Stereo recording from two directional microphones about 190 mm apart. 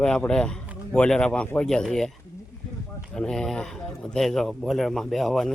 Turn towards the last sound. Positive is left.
turn(degrees=0)  # may be behind; listen again after turning